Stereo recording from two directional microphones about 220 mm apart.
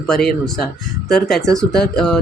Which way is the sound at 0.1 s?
Centre (ahead or behind).